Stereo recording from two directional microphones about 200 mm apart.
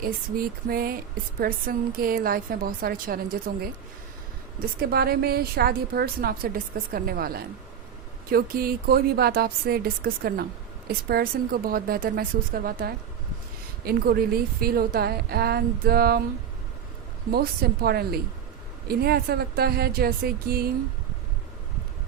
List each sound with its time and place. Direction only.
0.0 s speech: 45° right (ahead or behind)
4.6 s speech: 50° right (ahead or behind)
17.3 s speech: 50° right (ahead or behind)